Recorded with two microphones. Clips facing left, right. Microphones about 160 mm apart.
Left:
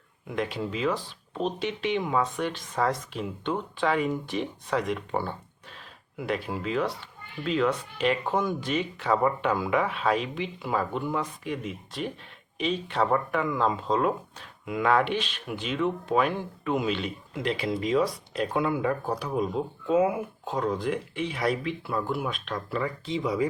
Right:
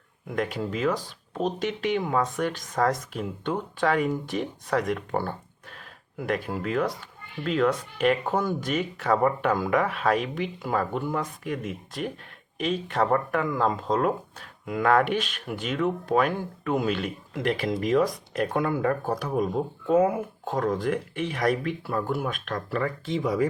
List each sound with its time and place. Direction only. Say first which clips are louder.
0.3 s a child's voice: right 2 dB; 45° right (ahead or behind)